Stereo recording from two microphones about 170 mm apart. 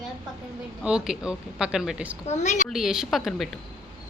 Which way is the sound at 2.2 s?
40° left (ahead or behind).